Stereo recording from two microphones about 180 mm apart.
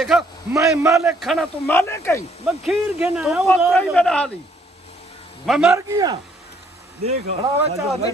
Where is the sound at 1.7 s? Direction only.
15° left (ahead or behind).